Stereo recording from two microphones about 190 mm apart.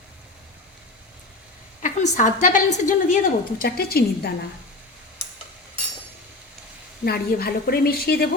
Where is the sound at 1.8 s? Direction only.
40° left (ahead or behind).